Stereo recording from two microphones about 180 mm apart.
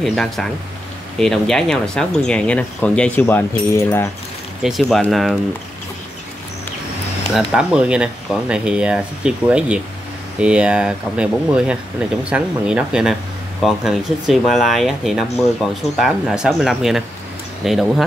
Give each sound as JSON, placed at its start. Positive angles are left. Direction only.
{"t": 0.0, "sound": "speech", "side_deg": 0}
{"t": 4.6, "sound": "speech", "side_deg": 0}
{"t": 7.3, "sound": "speech", "side_deg": -5}